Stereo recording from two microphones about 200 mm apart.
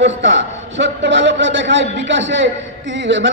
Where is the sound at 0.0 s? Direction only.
65° right (ahead or behind).